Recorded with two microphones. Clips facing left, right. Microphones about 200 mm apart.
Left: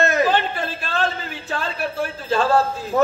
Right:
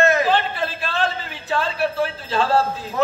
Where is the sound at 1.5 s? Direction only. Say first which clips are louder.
Right 4 dB; 45° left (ahead or behind).